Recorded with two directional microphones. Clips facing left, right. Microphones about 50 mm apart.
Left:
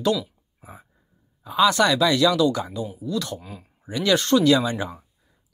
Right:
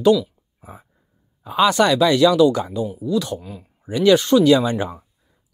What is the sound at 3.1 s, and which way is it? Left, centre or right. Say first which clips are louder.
Speech: right 6 dB; centre.